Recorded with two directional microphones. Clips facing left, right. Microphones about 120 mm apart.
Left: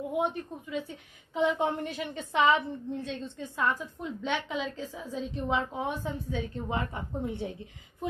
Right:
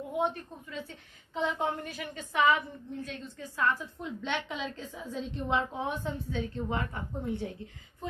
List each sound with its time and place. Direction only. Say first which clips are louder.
0.2 s a woman's voice: right 3 dB; 10° left (ahead or behind)
1.6 s a woman's voice: left 3 dB; 25° left (ahead or behind)
4.0 s a woman's voice: left 2 dB; 5° left (ahead or behind); by 7.5 s 20° left (ahead or behind)